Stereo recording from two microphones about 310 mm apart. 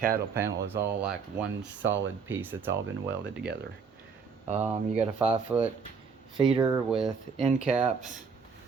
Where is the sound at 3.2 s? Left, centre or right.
Right.